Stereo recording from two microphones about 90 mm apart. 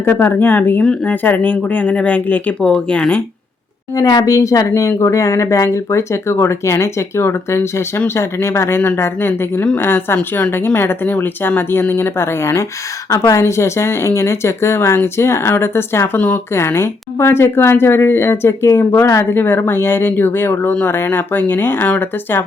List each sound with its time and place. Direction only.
0.0 s speech: 25° left (ahead or behind)
3.9 s speech: 45° left (ahead or behind); by 22.4 s 20° left (ahead or behind)